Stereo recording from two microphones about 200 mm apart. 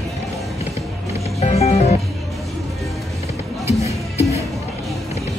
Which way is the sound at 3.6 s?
30° left (ahead or behind).